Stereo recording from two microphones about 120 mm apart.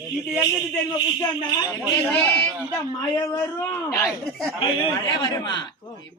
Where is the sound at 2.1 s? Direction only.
15° left (ahead or behind).